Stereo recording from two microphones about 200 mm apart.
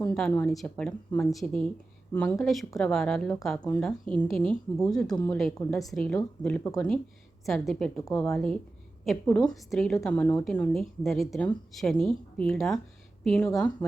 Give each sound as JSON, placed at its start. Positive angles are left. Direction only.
{"t": 0.0, "sound": "a woman's voice", "side_deg": 5}